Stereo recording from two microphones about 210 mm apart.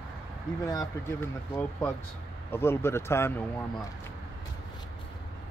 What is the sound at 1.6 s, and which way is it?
Speech, 10° left (ahead or behind).